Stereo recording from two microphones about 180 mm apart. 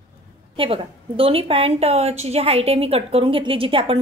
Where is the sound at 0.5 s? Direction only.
30° right (ahead or behind).